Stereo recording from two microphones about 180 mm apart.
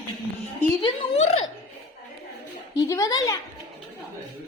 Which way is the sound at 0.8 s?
30° left (ahead or behind).